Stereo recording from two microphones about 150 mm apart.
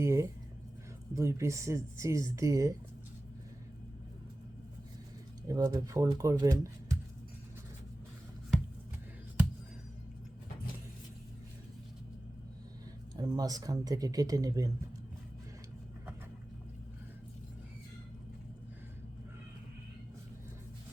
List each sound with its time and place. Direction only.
0.0 s speech: 20° right (ahead or behind)
5.5 s speech: 25° right (ahead or behind)
13.1 s speech: 25° right (ahead or behind)